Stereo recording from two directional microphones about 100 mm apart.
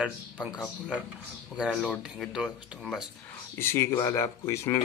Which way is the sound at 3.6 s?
25° left (ahead or behind).